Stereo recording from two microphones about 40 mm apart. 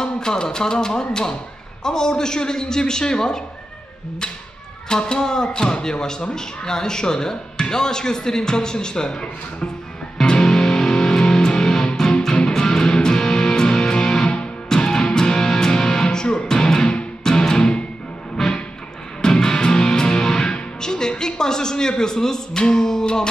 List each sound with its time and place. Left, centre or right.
0.0 s speech: centre
4.8 s speech: centre
10.2 s music: centre
14.2 s music: left
14.7 s music: centre
18.4 s music: centre
19.2 s music: centre